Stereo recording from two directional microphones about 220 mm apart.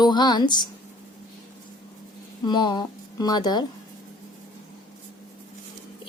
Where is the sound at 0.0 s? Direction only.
20° left (ahead or behind).